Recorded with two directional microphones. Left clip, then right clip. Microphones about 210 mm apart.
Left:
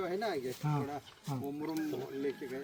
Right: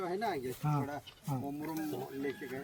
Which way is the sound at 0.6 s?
25° left (ahead or behind).